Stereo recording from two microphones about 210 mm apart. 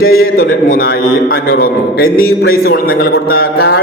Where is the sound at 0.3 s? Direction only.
45° left (ahead or behind).